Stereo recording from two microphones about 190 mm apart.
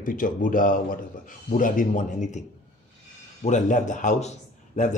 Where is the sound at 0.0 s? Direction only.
45° left (ahead or behind).